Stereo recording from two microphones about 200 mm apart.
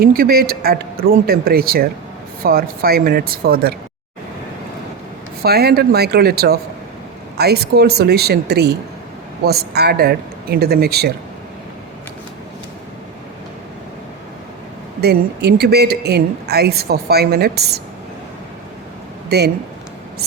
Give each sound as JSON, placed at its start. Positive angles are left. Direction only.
{"t": 0.0, "sound": "speech", "side_deg": -50}
{"t": 5.4, "sound": "speech", "side_deg": -50}
{"t": 15.0, "sound": "speech", "side_deg": -55}
{"t": 19.3, "sound": "speech", "side_deg": -55}